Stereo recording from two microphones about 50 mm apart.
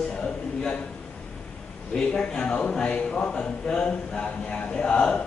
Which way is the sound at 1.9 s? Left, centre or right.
Centre.